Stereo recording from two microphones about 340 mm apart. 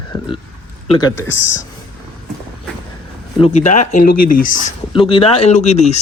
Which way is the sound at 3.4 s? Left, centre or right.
Left.